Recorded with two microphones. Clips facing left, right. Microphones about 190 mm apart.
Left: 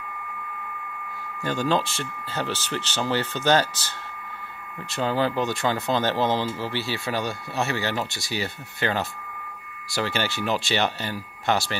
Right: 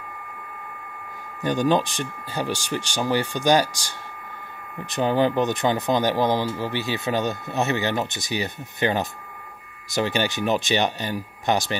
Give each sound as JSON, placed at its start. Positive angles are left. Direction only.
{"t": 1.4, "sound": "speech", "side_deg": -15}
{"t": 4.9, "sound": "speech", "side_deg": -20}